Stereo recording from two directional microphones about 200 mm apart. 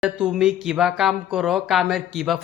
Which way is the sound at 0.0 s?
5° right (ahead or behind).